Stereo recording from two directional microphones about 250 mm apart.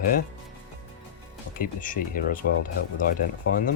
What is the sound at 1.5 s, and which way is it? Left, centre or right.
Speech, left.